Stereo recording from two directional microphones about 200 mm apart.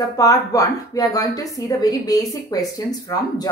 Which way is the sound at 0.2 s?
15° left (ahead or behind).